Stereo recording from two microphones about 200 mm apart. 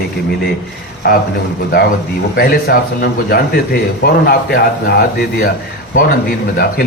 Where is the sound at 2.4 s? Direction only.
50° left (ahead or behind).